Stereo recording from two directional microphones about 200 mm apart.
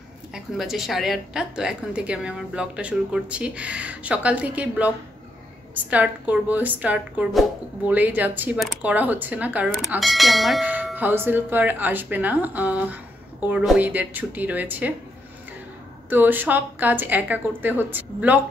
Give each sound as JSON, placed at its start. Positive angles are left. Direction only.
{"t": 0.3, "sound": "a woman's voice", "side_deg": 0}
{"t": 16.1, "sound": "a woman's voice", "side_deg": -10}